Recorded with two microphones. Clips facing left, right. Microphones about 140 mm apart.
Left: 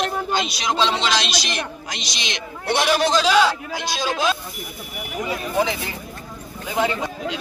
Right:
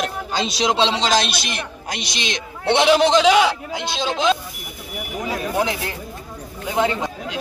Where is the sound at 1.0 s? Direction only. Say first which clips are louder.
Right 3 dB; 50° right (ahead or behind).